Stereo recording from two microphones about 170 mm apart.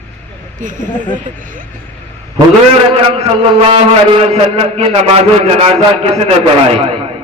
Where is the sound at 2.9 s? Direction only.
35° right (ahead or behind).